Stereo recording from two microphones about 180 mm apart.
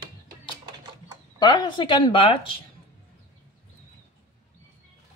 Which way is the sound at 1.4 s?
25° left (ahead or behind).